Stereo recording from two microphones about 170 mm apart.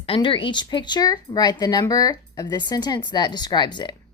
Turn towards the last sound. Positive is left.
turn(degrees=25)  # may be behind; listen again after turning